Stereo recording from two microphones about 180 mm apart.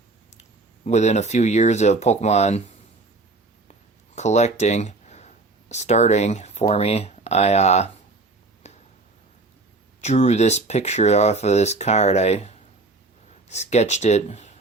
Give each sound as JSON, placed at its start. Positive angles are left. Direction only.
{"t": 0.9, "sound": "speech", "side_deg": 40}
{"t": 3.7, "sound": "speech", "side_deg": 40}
{"t": 8.7, "sound": "a sound", "side_deg": 40}
{"t": 10.0, "sound": "speech", "side_deg": 35}